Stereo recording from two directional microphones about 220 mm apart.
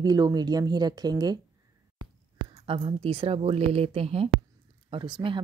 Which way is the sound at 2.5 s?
25° right (ahead or behind).